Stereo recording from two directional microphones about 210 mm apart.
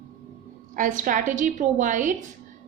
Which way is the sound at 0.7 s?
40° right (ahead or behind).